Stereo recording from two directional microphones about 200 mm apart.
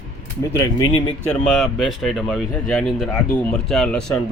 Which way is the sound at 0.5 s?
15° left (ahead or behind).